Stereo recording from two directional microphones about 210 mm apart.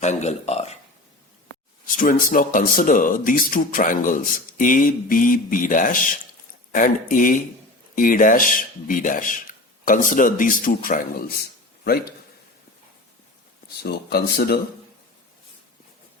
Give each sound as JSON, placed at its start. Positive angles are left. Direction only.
{"t": 0.0, "sound": "speech", "side_deg": 35}
{"t": 1.9, "sound": "speech", "side_deg": 40}
{"t": 13.8, "sound": "speech", "side_deg": 50}